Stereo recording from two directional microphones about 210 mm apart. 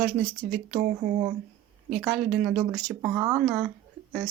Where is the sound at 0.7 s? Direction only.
35° right (ahead or behind).